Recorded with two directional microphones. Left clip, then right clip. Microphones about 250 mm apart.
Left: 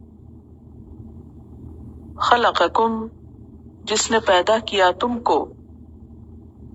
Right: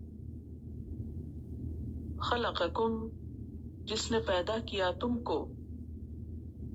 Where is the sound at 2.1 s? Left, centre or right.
Left.